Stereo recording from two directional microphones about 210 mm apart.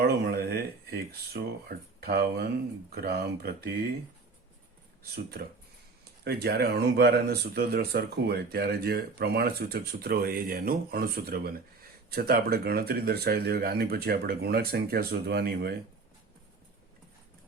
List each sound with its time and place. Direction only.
0.0 s speech: 45° right (ahead or behind)
6.2 s speech: 50° right (ahead or behind)